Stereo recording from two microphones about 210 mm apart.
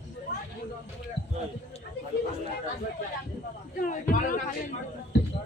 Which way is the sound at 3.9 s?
40° left (ahead or behind).